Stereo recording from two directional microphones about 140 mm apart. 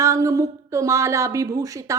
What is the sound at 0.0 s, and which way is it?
Speech, 20° right (ahead or behind).